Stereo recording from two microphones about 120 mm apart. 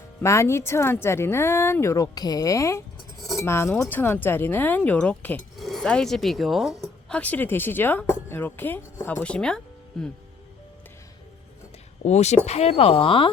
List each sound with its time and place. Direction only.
0.2 s speech: 20° left (ahead or behind)
3.2 s cutlery: centre (ahead or behind)
3.4 s speech: 20° left (ahead or behind)
5.5 s speech: centre (ahead or behind)
10.0 s music: 5° left (ahead or behind)
12.0 s speech: 65° left (ahead or behind); by 13.3 s 45° left (ahead or behind)